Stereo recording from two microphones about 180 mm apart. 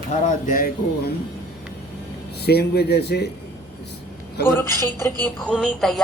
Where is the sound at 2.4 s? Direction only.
65° left (ahead or behind).